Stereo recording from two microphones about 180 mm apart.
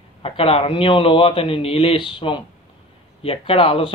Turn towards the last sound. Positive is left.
turn(degrees=30)  # may be behind; listen again after turning